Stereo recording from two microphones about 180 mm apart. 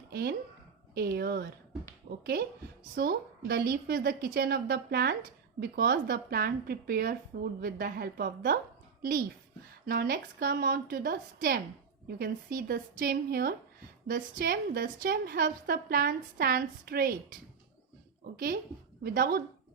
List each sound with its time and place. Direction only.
0.1 s a woman's voice: 60° right (ahead or behind)
19.0 s a woman's voice: 55° right (ahead or behind)